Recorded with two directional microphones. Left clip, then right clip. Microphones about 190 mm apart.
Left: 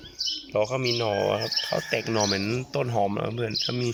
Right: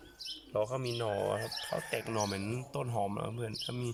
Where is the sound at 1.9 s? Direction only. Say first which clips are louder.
Left 10 dB; 5° left (ahead or behind).